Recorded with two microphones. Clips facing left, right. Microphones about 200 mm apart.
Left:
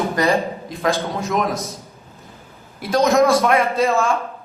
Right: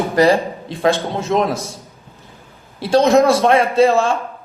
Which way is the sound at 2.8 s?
30° right (ahead or behind).